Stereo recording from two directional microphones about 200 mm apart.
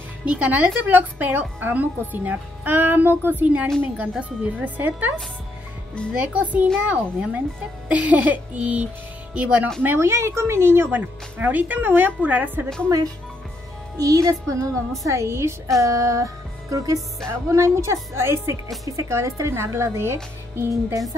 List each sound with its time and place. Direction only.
0.2 s a woman's voice: 5° right (ahead or behind)
6.1 s a woman's voice: 5° right (ahead or behind)